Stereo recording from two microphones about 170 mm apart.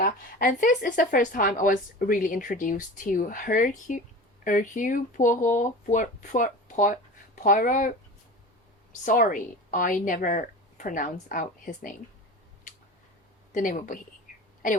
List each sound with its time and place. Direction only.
0.0 s speech: 50° left (ahead or behind)
9.0 s speech: 55° left (ahead or behind)
13.5 s speech: 50° left (ahead or behind)